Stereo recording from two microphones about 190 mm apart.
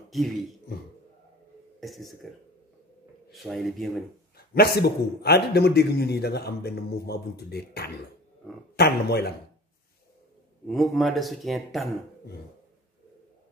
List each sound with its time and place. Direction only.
0.1 s speech: centre (ahead or behind)
1.8 s speech: centre (ahead or behind)
3.3 s speech: centre (ahead or behind)
4.6 s a man's voice: 55° left (ahead or behind)
10.7 s speech: centre (ahead or behind)